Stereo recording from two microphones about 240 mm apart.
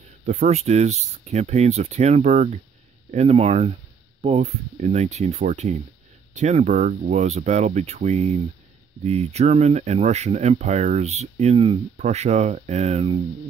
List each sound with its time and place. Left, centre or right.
0.3 s speech: right